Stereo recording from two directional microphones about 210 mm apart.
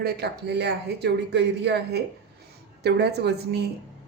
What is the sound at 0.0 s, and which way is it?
Speech, 50° right (ahead or behind).